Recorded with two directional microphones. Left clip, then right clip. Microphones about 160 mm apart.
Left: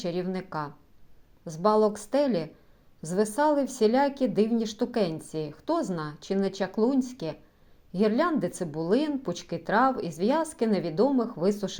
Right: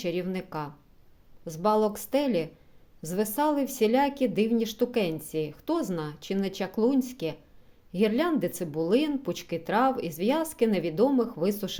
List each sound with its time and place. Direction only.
0.0 s a woman's voice: 15° right (ahead or behind)